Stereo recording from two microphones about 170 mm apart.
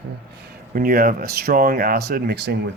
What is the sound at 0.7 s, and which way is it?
Speech, 60° right (ahead or behind).